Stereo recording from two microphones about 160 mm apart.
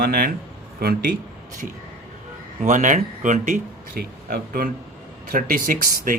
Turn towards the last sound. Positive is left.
turn(degrees=-60)  # may be behind; listen again after turning